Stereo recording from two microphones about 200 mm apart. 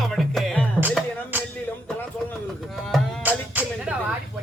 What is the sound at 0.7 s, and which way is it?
Music, 10° right (ahead or behind).